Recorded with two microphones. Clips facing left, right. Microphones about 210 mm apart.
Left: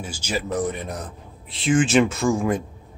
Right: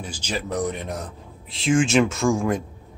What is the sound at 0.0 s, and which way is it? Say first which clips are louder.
A man's voice: left 2 dB; 10° left (ahead or behind).